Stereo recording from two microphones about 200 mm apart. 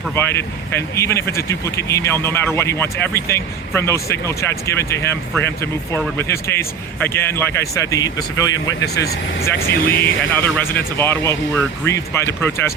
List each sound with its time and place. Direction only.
0.2 s speech: 10° left (ahead or behind)
9.0 s speech: 50° left (ahead or behind)
10.2 s speech: 10° left (ahead or behind)